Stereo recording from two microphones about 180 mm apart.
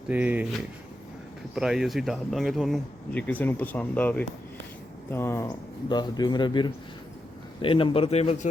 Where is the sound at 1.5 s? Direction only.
Centre (ahead or behind).